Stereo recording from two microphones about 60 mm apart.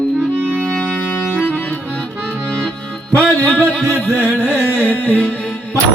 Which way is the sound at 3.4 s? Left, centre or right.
Left.